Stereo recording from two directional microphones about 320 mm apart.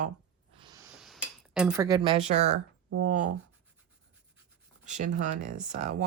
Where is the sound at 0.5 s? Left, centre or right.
Centre.